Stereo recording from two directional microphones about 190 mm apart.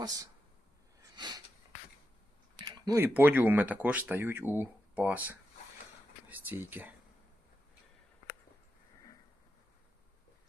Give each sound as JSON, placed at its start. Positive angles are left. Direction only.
{"t": 1.1, "sound": "sniff", "side_deg": -20}
{"t": 2.6, "sound": "a sound", "side_deg": -20}
{"t": 3.2, "sound": "speech", "side_deg": -10}